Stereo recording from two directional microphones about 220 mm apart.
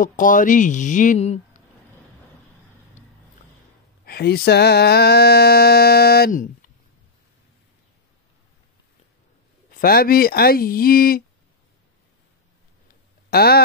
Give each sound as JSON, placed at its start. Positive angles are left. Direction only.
{"t": 0.0, "sound": "speech", "side_deg": 40}
{"t": 4.0, "sound": "mantra", "side_deg": 45}
{"t": 9.7, "sound": "mantra", "side_deg": 40}
{"t": 13.3, "sound": "speech", "side_deg": 45}